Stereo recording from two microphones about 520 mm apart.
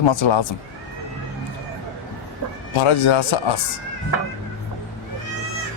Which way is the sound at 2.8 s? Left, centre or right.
Left.